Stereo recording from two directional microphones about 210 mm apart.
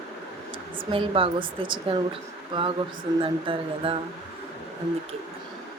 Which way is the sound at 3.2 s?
25° right (ahead or behind).